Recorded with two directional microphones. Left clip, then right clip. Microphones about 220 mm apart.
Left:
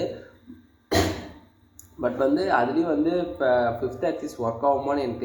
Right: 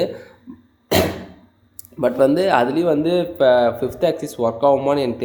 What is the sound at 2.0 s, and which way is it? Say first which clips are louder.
Speech: right 7 dB; 40° right (ahead or behind).